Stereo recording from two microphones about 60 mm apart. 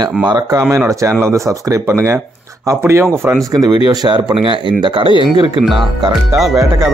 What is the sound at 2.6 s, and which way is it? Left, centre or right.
Speech, right.